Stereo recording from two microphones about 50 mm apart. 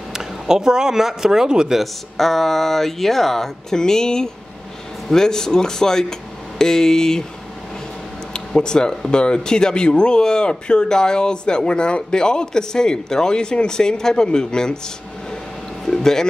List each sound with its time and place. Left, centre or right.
0.1 s speech: centre
1.8 s speech: centre
8.3 s speech: centre
15.8 s a sound: centre